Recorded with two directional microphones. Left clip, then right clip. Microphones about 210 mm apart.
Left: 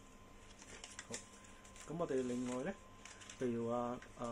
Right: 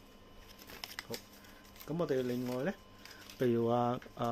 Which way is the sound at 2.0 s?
80° right.